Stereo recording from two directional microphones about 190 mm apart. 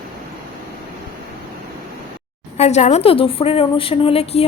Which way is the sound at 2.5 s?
35° left (ahead or behind).